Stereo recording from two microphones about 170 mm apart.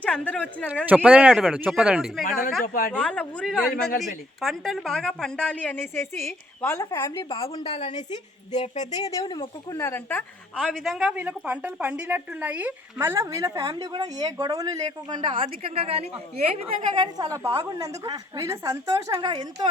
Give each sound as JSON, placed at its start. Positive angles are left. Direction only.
{"t": 0.0, "sound": "speech", "side_deg": 5}
{"t": 0.9, "sound": "speech", "side_deg": -10}
{"t": 2.9, "sound": "speech", "side_deg": 5}
{"t": 7.3, "sound": "a woman's voice", "side_deg": 35}
{"t": 8.9, "sound": "a woman's voice", "side_deg": 20}